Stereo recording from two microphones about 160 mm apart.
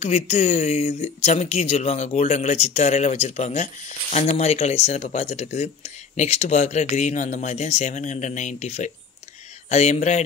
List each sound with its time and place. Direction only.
0.0 s speech: 45° left (ahead or behind)